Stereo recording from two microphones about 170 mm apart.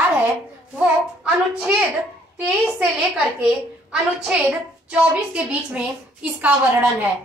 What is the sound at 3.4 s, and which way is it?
A child's voice, 5° right (ahead or behind).